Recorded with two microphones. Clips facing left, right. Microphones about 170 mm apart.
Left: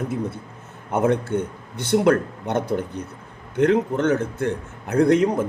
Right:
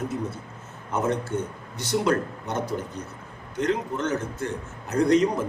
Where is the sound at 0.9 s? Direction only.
55° left (ahead or behind).